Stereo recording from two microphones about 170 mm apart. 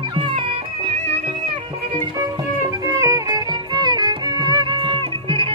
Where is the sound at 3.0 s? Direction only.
20° right (ahead or behind).